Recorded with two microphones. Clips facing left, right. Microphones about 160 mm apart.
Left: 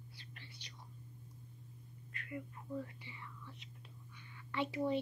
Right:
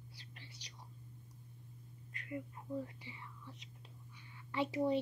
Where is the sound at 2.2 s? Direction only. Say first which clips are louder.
Right 2 dB; 25° right (ahead or behind).